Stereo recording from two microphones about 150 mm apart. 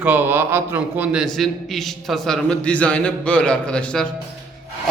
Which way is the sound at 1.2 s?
Centre (ahead or behind).